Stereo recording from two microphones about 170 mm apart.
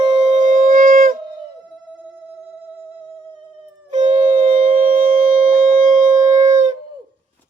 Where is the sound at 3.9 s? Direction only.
50° right (ahead or behind).